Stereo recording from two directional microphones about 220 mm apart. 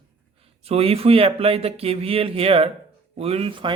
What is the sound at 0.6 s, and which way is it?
Speech, 25° right (ahead or behind).